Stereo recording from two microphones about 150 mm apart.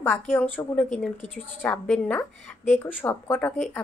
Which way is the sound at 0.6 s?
15° left (ahead or behind).